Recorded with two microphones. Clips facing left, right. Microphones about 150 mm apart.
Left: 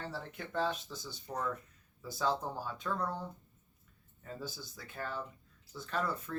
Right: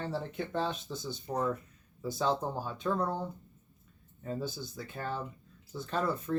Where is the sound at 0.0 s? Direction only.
25° right (ahead or behind).